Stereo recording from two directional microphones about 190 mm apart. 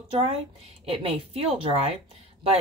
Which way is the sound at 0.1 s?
30° right (ahead or behind).